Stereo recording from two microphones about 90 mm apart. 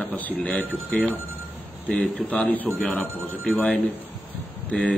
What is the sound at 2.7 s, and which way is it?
Speech, 5° left (ahead or behind).